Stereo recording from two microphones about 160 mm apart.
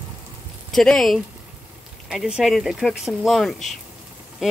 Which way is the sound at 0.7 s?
Centre (ahead or behind).